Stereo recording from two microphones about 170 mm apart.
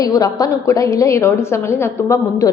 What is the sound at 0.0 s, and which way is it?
A woman's voice, 20° left (ahead or behind).